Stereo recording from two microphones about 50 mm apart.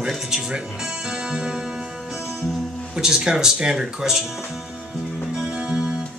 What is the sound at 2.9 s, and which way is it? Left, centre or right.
Speech, centre.